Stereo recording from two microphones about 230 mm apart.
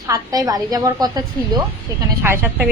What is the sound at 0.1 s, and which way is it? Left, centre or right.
A woman's voice, centre.